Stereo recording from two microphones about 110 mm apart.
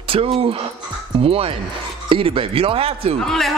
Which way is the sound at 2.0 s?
50° right (ahead or behind).